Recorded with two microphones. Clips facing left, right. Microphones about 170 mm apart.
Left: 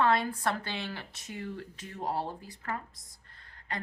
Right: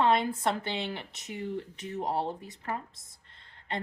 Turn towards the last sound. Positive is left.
turn(degrees=-25)  # may be behind; listen again after turning